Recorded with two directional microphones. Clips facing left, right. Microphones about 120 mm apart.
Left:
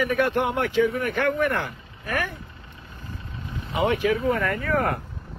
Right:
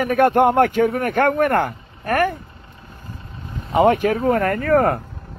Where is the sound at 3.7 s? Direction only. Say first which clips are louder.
Right 7 dB; 45° right (ahead or behind).